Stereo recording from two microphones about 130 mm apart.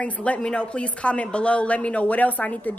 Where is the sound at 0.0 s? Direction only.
10° left (ahead or behind).